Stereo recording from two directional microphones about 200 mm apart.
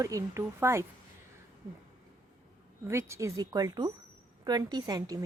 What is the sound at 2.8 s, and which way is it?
Speech, 15° right (ahead or behind).